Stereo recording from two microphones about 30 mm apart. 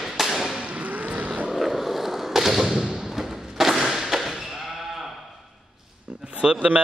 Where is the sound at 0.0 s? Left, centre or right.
Centre.